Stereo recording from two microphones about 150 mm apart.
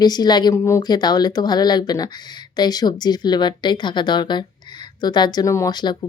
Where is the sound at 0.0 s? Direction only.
25° left (ahead or behind).